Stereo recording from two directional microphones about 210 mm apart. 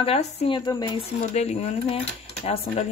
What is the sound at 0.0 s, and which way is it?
Speech, 30° left (ahead or behind).